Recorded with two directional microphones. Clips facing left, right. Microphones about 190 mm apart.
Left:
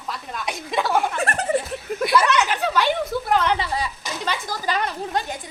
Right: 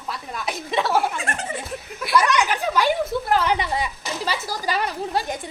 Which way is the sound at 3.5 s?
20° right (ahead or behind).